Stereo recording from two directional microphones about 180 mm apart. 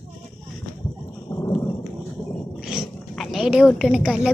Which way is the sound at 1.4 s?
15° left (ahead or behind).